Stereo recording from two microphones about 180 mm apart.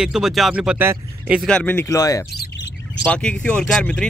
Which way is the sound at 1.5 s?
10° left (ahead or behind).